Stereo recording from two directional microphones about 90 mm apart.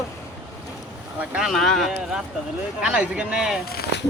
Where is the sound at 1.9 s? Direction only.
10° right (ahead or behind).